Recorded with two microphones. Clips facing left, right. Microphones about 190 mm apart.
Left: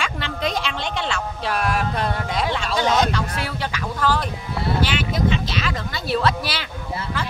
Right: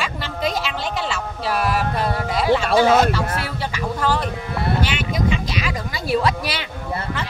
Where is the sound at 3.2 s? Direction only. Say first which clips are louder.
Right 2 dB; 45° right (ahead or behind).